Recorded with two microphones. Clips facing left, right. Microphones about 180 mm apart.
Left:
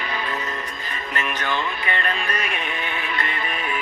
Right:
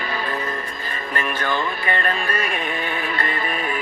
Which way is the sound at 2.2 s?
35° right (ahead or behind).